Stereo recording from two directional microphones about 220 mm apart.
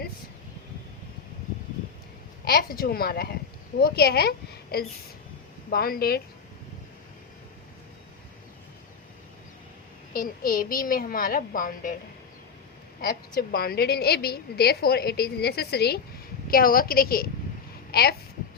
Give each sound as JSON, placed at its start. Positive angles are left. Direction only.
{"t": 2.4, "sound": "a woman's voice", "side_deg": 45}
{"t": 10.1, "sound": "a woman's voice", "side_deg": 40}
{"t": 13.0, "sound": "a woman's voice", "side_deg": 45}